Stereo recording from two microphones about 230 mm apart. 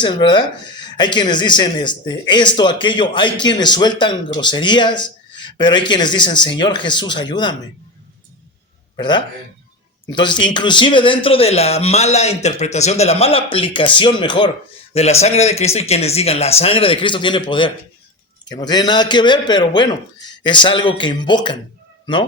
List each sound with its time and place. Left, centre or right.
0.0 s speech: centre
9.0 s speech: centre